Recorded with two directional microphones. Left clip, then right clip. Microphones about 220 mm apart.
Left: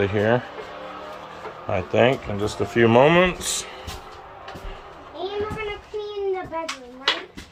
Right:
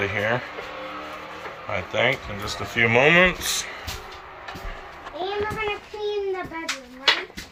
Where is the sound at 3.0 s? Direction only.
20° left (ahead or behind).